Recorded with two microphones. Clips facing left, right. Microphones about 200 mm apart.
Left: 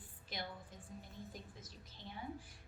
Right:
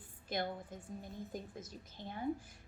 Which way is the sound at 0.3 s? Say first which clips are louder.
Right 9 dB; 50° right (ahead or behind).